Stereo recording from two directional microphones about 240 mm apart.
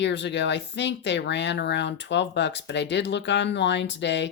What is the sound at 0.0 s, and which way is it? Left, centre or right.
Speech, left.